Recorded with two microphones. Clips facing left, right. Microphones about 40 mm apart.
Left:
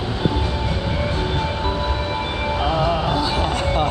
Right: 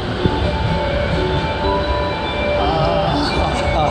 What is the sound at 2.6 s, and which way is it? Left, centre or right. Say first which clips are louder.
Music: right 1 dB; right.